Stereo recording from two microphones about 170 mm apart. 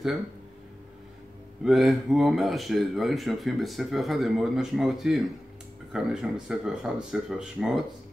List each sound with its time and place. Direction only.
1.6 s speech: centre (ahead or behind)